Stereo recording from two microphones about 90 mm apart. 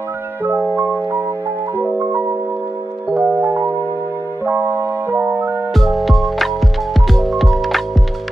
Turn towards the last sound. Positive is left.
turn(degrees=0)  # may be behind; listen again after turning